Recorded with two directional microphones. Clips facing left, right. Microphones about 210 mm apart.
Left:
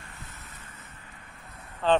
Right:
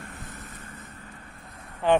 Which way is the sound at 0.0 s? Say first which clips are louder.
Right 6 dB; 50° right (ahead or behind).